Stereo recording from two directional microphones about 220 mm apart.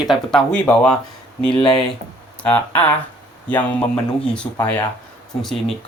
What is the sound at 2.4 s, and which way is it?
Speech, 5° left (ahead or behind).